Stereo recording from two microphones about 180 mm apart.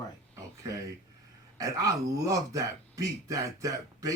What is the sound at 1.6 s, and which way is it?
Speech, 20° right (ahead or behind).